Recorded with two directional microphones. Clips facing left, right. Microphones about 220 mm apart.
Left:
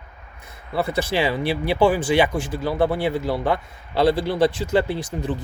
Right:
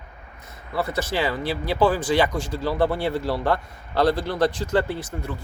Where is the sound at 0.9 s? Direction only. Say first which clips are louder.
Left 3 dB; 15° left (ahead or behind).